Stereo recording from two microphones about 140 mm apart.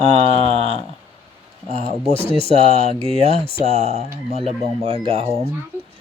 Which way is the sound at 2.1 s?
50° right (ahead or behind).